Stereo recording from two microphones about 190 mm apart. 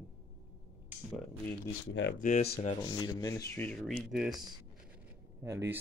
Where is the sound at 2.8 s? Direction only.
20° left (ahead or behind).